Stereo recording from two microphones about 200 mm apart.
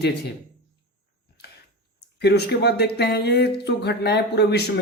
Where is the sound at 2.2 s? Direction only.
55° left (ahead or behind).